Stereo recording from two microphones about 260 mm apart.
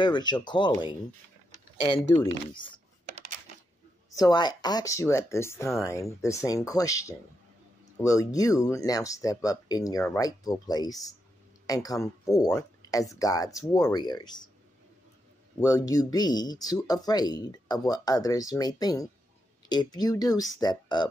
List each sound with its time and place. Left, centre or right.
0.0 s speech: centre
2.1 s speech: centre
4.1 s speech: centre
15.6 s speech: centre